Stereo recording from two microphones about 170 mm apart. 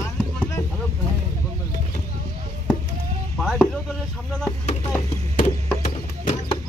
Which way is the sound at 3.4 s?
Centre (ahead or behind).